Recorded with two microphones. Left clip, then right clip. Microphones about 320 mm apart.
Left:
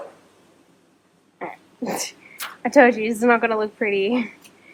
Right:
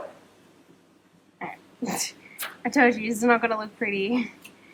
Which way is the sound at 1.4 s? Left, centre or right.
Centre.